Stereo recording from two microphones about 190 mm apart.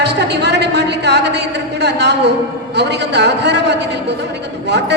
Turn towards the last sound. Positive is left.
turn(degrees=-65)  # may be behind; listen again after turning